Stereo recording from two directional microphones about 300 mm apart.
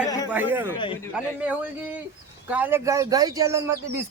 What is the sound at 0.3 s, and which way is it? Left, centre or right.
A man's voice, centre.